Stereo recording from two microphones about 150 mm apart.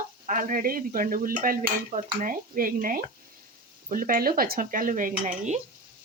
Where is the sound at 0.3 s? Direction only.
65° right (ahead or behind).